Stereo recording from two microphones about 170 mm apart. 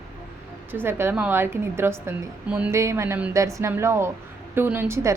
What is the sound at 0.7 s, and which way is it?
A woman's voice, 15° right (ahead or behind).